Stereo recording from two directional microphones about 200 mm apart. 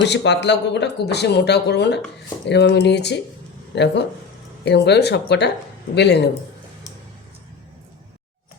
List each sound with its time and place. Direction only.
0.0 s speech: 60° left (ahead or behind)